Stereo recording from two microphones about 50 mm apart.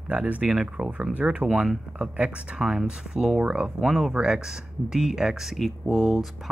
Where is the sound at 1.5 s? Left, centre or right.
Centre.